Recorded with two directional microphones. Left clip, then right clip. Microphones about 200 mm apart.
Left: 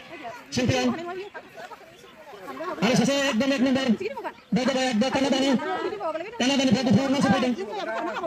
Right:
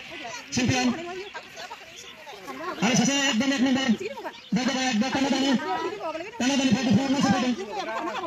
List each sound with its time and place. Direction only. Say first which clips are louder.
0.5 s speech: left 1 dB; 40° left (ahead or behind)
2.8 s speech: left 1 dB; 40° left (ahead or behind)
5.6 s speech: left 1 dB; 35° right (ahead or behind)
6.3 s a sound: left 1 dB; 25° left (ahead or behind)
7.2 s speech: left 2 dB; 35° right (ahead or behind)